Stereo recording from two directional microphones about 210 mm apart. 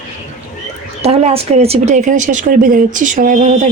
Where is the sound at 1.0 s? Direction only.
30° right (ahead or behind).